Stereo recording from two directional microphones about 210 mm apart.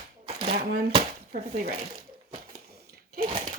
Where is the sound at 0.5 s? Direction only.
45° right (ahead or behind).